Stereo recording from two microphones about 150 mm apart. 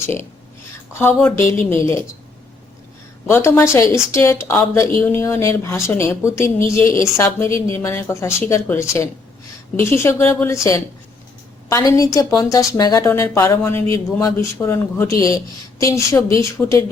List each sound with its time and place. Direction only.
0.0 s a woman's voice: 15° left (ahead or behind)
3.2 s a woman's voice: 15° left (ahead or behind)